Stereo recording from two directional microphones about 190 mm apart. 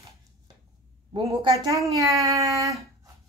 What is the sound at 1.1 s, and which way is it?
A woman's voice, 25° right (ahead or behind).